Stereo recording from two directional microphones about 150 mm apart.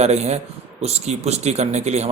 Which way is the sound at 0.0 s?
45° right (ahead or behind).